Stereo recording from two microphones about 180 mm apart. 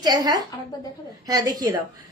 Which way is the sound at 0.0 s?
20° right (ahead or behind).